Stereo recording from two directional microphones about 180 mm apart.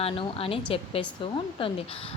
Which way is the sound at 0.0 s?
30° left (ahead or behind).